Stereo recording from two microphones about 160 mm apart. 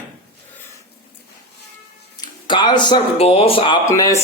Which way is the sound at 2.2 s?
30° left (ahead or behind).